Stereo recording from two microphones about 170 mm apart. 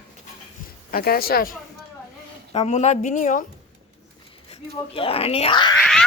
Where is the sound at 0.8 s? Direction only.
60° left (ahead or behind).